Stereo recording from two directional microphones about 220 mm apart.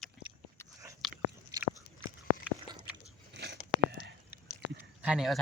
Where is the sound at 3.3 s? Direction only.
50° right (ahead or behind).